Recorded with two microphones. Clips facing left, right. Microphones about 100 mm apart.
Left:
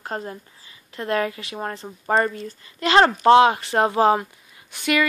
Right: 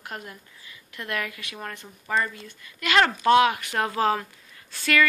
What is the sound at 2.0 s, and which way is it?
A woman's voice, 40° left (ahead or behind).